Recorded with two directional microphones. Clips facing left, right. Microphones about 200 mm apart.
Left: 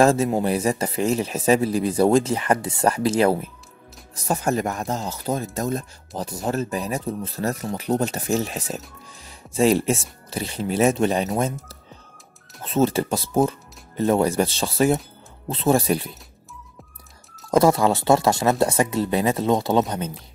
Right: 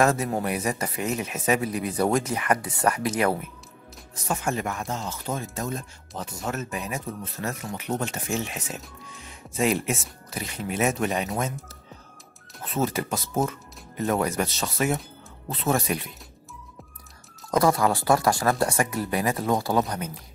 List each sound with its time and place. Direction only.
0.0 s speech: 25° left (ahead or behind)
12.6 s speech: 30° left (ahead or behind)
17.5 s speech: 25° left (ahead or behind)